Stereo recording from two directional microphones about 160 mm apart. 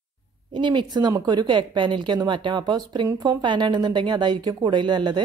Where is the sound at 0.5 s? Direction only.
30° right (ahead or behind).